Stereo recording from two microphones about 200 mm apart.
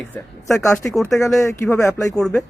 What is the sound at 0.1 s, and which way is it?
Speech, 15° left (ahead or behind).